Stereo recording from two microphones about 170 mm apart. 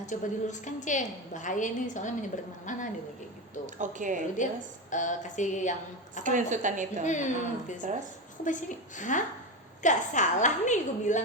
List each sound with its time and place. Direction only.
0.0 s a woman's voice: 45° left (ahead or behind)
3.8 s a woman's voice: 50° right (ahead or behind)
4.4 s a woman's voice: 50° left (ahead or behind)
6.2 s a woman's voice: 50° right (ahead or behind)
7.0 s a woman's voice: 45° left (ahead or behind)
7.8 s a woman's voice: 45° right (ahead or behind)
8.4 s a woman's voice: 50° left (ahead or behind)